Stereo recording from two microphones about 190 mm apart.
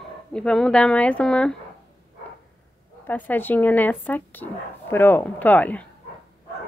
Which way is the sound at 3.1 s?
10° left (ahead or behind).